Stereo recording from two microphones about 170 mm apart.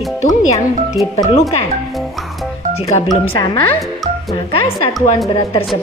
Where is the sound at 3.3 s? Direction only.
25° left (ahead or behind).